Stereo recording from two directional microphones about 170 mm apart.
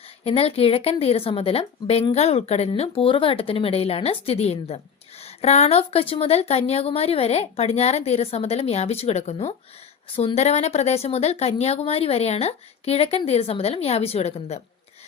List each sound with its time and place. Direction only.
0.3 s a woman's voice: 35° left (ahead or behind)